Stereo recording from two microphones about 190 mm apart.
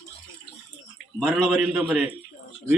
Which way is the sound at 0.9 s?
Centre (ahead or behind).